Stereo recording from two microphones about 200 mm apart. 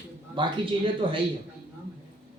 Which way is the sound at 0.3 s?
25° right (ahead or behind).